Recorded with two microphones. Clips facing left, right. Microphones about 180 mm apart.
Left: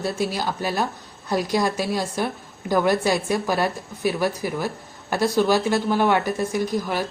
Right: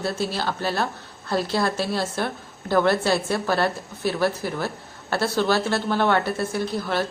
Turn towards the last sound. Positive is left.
turn(degrees=10)  # may be behind; listen again after turning